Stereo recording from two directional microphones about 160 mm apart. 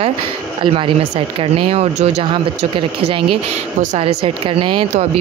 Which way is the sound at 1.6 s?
40° right (ahead or behind).